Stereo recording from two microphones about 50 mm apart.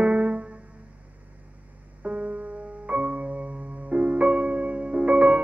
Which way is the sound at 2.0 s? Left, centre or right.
Right.